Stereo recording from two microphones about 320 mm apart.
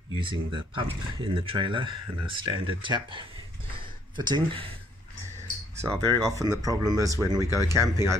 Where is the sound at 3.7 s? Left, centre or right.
Centre.